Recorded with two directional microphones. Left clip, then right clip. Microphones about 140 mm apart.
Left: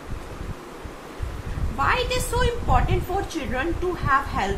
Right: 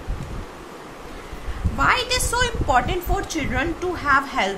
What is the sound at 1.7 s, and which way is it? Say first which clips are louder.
A woman's voice: right 3 dB; 60° right (ahead or behind).